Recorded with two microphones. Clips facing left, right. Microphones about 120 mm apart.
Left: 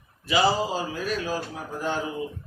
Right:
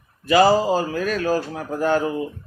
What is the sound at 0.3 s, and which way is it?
A man's voice, 50° right (ahead or behind).